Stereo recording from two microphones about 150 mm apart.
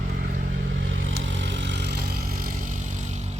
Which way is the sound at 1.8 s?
90° right.